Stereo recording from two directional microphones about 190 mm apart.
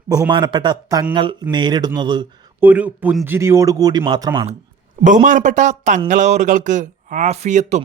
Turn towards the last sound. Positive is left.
turn(degrees=-35)  # may be behind; listen again after turning